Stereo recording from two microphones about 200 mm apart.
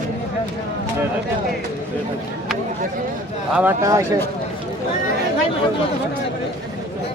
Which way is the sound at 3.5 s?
10° right (ahead or behind).